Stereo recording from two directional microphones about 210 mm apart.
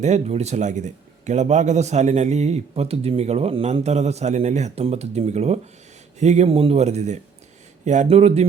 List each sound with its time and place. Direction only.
0.0 s a man's voice: 30° right (ahead or behind)